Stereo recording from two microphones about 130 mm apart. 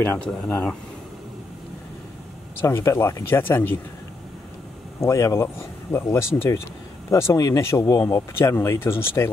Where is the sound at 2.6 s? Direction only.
25° left (ahead or behind).